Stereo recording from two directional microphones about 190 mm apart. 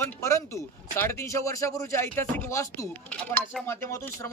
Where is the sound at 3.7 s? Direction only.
15° left (ahead or behind).